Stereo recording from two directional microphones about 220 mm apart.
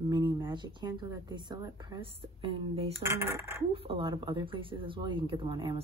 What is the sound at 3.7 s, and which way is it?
Speech, 25° right (ahead or behind).